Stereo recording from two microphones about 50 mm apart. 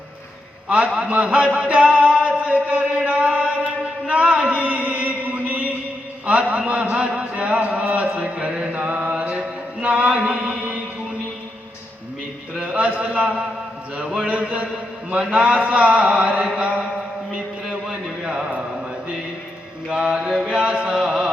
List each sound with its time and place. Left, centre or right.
0.9 s a sound: right
2.9 s chant: right
4.0 s a sound: right
8.0 s mantra: right
8.9 s chant: right
12.7 s a sound: right
14.3 s mantra: right
17.3 s mantra: centre
20.3 s chant: centre